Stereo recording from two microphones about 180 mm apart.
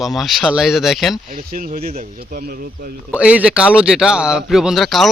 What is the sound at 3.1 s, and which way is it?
Speech, 5° right (ahead or behind).